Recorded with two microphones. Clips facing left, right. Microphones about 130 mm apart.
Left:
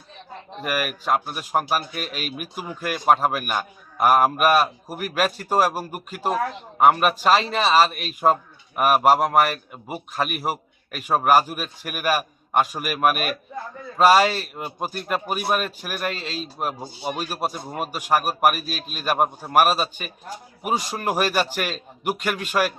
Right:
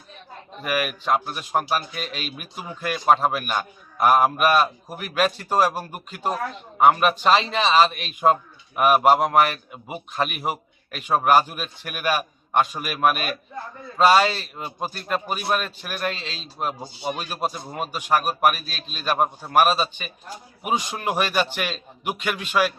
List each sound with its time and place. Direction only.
0.6 s a man's voice: 5° left (ahead or behind)
20.9 s a man's voice: 5° left (ahead or behind)
22.4 s speech: 45° left (ahead or behind)